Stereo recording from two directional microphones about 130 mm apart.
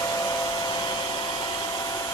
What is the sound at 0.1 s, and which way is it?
Hair dryer, 25° left (ahead or behind).